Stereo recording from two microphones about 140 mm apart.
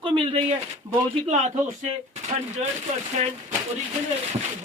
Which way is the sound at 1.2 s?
55° right (ahead or behind).